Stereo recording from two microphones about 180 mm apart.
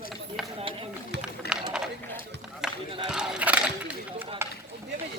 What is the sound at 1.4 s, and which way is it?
Run, 65° left (ahead or behind).